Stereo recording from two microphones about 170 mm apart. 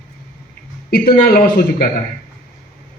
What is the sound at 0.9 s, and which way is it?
Speech, 60° left (ahead or behind).